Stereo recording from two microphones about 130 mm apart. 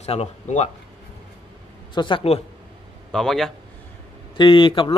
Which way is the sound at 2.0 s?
40° left (ahead or behind).